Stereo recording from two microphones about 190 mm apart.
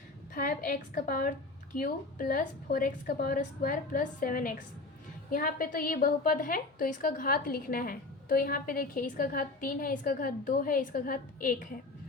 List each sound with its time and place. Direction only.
0.3 s a woman's voice: 50° left (ahead or behind)